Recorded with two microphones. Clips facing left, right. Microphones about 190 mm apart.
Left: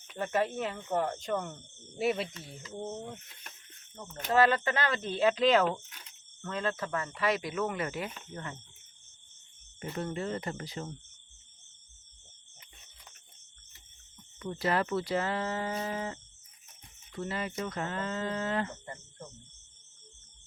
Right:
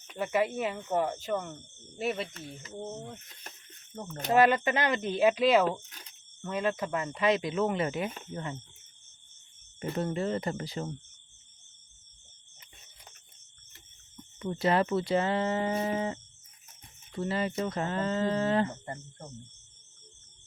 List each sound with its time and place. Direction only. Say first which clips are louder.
0.1 s speech: right 2 dB; 10° right (ahead or behind)
3.9 s speech: right 5 dB; 45° right (ahead or behind)
4.3 s speech: right 2 dB; 15° right (ahead or behind)
10.0 s speech: right 4 dB; 30° right (ahead or behind)
14.3 s speech: right 4 dB; 20° right (ahead or behind)